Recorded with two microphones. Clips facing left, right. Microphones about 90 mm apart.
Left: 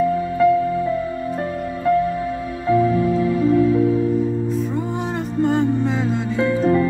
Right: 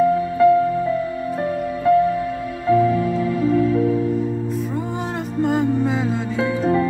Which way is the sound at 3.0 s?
10° left (ahead or behind).